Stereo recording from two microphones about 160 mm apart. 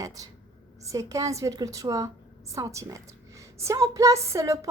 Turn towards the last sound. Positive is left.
turn(degrees=-20)  # may be behind; listen again after turning